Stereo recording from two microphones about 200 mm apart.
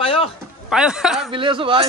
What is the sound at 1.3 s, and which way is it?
Speech, 25° right (ahead or behind).